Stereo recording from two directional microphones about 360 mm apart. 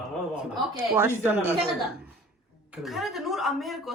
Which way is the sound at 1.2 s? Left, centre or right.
Centre.